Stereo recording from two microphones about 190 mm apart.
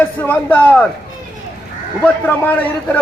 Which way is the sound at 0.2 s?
10° left (ahead or behind).